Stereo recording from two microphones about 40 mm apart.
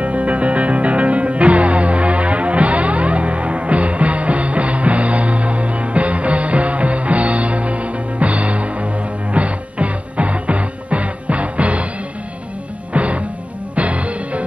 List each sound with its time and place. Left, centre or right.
0.0 s music: right
12.9 s music: right